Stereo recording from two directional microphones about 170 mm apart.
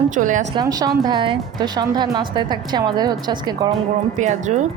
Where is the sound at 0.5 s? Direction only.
20° right (ahead or behind).